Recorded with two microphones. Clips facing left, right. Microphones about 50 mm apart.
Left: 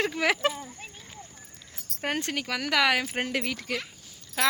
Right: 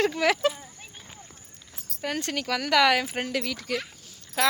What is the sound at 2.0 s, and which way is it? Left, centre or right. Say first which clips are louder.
Speech: left 1 dB; left.